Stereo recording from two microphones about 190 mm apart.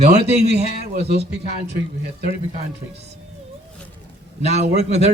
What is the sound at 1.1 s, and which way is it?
Speech, 60° right (ahead or behind).